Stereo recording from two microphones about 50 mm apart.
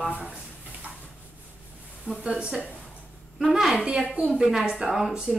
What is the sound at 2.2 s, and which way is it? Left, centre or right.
Speech, centre.